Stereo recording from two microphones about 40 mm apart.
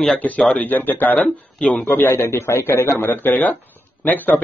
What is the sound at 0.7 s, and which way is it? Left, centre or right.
Speech, left.